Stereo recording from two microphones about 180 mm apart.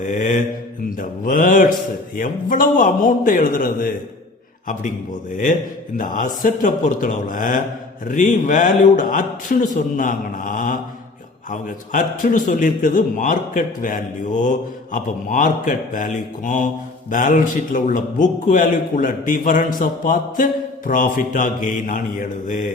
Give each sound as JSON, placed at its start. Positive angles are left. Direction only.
{"t": 0.0, "sound": "a man's voice", "side_deg": 45}
{"t": 6.0, "sound": "a man's voice", "side_deg": 50}